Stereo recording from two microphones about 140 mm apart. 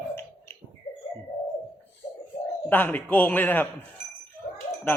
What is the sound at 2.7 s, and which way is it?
Speech, 15° left (ahead or behind).